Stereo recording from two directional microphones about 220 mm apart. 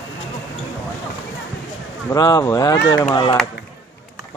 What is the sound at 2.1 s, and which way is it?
Speech, 15° left (ahead or behind).